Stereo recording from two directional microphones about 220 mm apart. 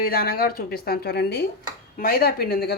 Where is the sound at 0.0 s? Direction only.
45° left (ahead or behind).